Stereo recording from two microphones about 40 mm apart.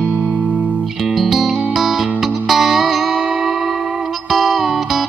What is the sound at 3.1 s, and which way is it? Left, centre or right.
Music, right.